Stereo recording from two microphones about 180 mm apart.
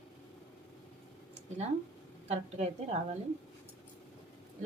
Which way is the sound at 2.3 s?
35° right (ahead or behind).